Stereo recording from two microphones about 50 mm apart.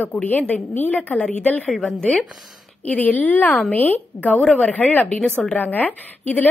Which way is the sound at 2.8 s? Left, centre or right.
Left.